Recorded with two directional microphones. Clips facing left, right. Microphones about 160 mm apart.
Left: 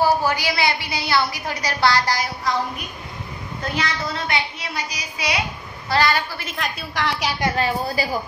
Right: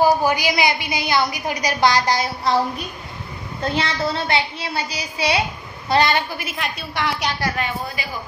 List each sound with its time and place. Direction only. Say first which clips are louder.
0.0 s a woman's voice: right 2 dB; 15° right (ahead or behind)
3.6 s a woman's voice: right 4 dB; 30° right (ahead or behind)
6.4 s a woman's voice: right 1 dB; 5° right (ahead or behind)
7.5 s a woman's voice: left 4 dB; 35° left (ahead or behind)